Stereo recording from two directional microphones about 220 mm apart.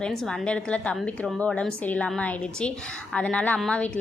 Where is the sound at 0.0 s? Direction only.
Centre (ahead or behind).